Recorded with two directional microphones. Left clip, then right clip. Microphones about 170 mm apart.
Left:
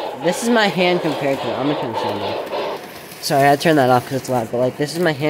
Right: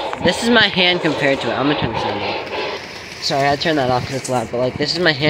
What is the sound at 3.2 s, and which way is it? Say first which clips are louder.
Speech: left 3 dB; 30° left (ahead or behind).